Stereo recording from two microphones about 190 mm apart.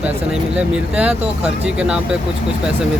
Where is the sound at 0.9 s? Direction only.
5° right (ahead or behind).